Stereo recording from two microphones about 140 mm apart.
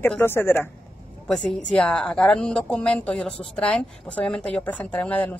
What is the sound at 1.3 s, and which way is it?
A woman's voice, 5° left (ahead or behind).